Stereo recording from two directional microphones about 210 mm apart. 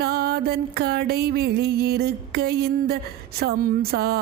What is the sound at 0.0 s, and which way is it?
Music, 50° right (ahead or behind).